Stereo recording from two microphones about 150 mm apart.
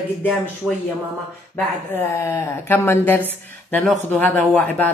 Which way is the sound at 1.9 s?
15° left (ahead or behind).